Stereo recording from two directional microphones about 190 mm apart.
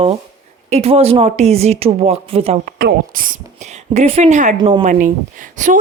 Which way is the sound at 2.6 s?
55° right (ahead or behind).